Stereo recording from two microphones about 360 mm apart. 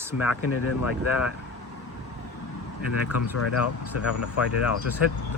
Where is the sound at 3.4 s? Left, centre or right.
Left.